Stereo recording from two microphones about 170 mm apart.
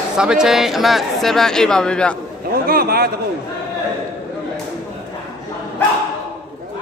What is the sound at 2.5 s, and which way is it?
Speech, 60° right (ahead or behind).